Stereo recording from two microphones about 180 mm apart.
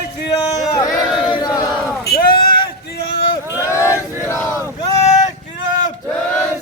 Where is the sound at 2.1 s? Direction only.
55° left (ahead or behind).